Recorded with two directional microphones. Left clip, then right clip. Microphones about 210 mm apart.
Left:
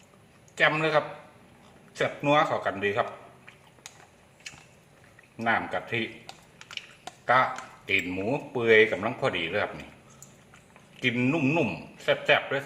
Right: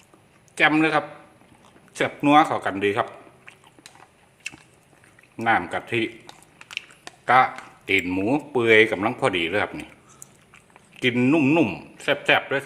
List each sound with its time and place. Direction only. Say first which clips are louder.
0.5 s a man's voice: right 4 dB; 40° right (ahead or behind)
5.4 s speech: right 5 dB; 45° right (ahead or behind)
7.3 s speech: right 5 dB; 45° right (ahead or behind)
11.0 s speech: right 6 dB; 45° right (ahead or behind)